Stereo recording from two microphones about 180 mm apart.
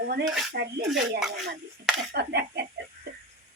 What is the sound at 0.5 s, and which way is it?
Speech, 65° right (ahead or behind).